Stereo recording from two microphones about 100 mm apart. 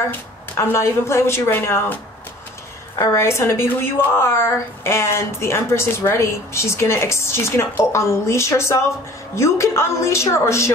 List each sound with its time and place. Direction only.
0.1 s a woman's voice: 25° left (ahead or behind)
3.0 s a woman's voice: 30° left (ahead or behind)